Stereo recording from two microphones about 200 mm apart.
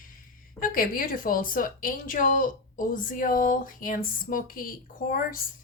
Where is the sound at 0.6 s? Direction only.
45° left (ahead or behind).